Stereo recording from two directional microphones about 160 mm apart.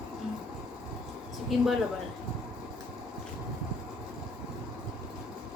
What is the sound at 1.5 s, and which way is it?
Speech, centre (ahead or behind).